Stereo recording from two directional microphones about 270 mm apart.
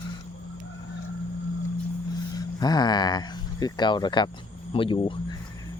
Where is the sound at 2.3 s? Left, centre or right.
Centre.